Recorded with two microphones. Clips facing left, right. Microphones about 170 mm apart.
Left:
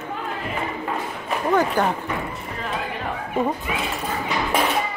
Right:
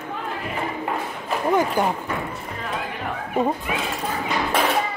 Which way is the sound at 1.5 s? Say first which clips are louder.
Left 1 dB; 10° right (ahead or behind).